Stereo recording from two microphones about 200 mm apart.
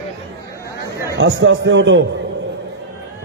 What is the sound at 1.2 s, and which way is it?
Speech, 65° right (ahead or behind).